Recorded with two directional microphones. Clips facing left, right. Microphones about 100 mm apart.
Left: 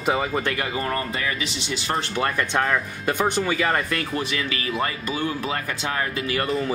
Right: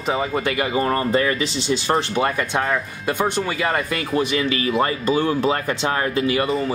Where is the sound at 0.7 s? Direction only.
30° right (ahead or behind).